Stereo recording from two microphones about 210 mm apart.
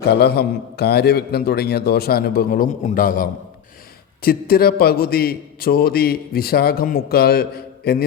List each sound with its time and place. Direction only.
0.1 s a man's voice: 50° left (ahead or behind)